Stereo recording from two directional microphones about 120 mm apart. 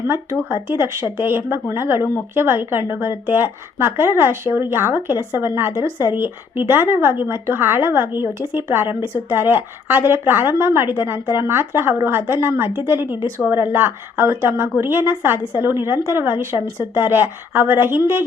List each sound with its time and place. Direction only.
0.0 s a woman's voice: 25° right (ahead or behind)